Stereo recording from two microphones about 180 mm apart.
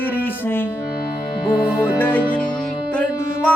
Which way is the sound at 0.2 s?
10° left (ahead or behind).